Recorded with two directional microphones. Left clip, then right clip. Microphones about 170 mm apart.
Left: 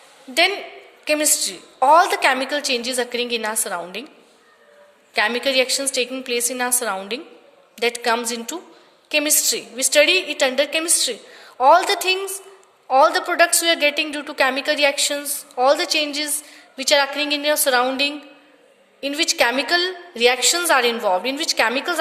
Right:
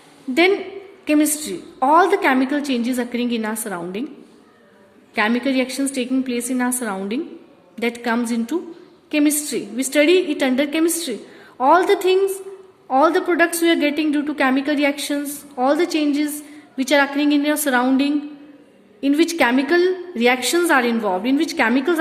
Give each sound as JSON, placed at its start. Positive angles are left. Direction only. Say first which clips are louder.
{"t": 0.3, "sound": "a woman's voice", "louder": "right 2 dB", "side_deg": 15}
{"t": 5.1, "sound": "a woman's voice", "louder": "left 1 dB", "side_deg": 20}